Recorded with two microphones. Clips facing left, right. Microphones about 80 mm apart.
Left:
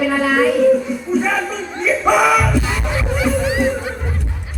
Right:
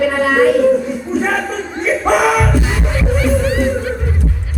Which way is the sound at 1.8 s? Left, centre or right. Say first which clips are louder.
Even; right.